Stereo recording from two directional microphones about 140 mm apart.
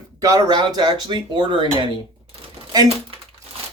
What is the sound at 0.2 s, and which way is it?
Speech, 25° right (ahead or behind).